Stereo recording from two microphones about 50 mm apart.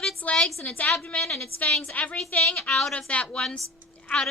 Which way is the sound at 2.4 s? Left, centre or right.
Centre.